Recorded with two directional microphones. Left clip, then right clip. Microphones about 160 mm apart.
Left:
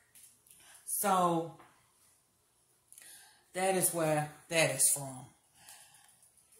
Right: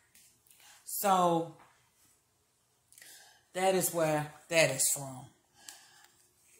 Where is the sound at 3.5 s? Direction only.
10° right (ahead or behind).